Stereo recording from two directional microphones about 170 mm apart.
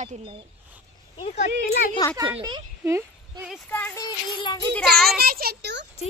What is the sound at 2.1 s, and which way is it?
Speech, 25° right (ahead or behind).